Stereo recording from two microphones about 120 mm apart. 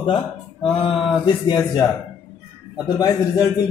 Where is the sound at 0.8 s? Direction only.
45° left (ahead or behind).